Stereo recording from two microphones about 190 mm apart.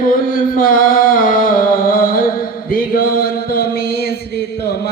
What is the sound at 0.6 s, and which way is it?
Music, 50° left (ahead or behind).